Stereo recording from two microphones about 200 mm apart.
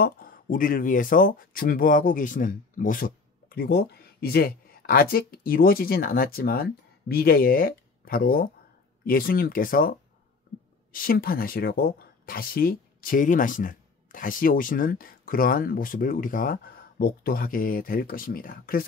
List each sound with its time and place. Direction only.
0.0 s speech: 45° left (ahead or behind)